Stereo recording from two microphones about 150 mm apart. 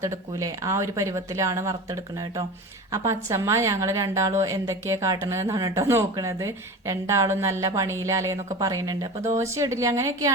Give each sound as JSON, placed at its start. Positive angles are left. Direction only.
{"t": 0.0, "sound": "a woman's voice", "side_deg": -20}